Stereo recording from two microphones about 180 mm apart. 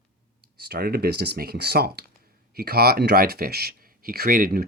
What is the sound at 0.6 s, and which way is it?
Speech, 60° right (ahead or behind).